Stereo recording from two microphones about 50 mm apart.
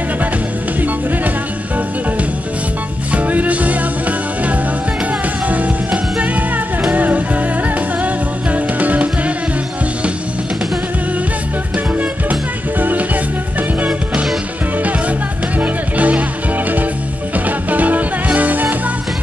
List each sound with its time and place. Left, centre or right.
0.7 s music: right
3.1 s music: right
5.9 s music: right
11.7 s music: right